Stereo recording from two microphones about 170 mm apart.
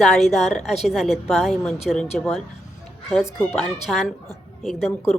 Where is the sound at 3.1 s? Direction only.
Centre (ahead or behind).